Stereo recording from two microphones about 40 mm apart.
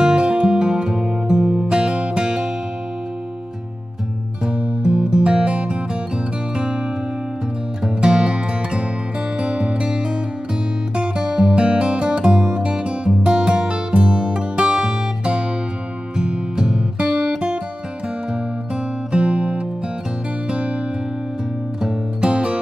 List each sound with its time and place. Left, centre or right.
0.0 s music: right
4.5 s music: right
8.0 s music: right
19.1 s music: right
21.8 s music: right